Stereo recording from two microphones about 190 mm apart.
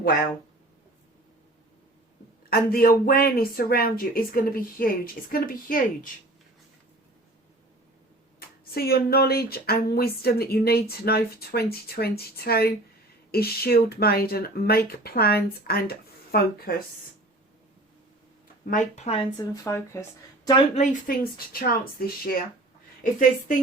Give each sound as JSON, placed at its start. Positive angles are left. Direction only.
{"t": 0.0, "sound": "speech", "side_deg": 50}
{"t": 2.5, "sound": "speech", "side_deg": 50}
{"t": 8.4, "sound": "speech", "side_deg": 55}
{"t": 18.6, "sound": "speech", "side_deg": 40}
{"t": 21.1, "sound": "speech", "side_deg": 50}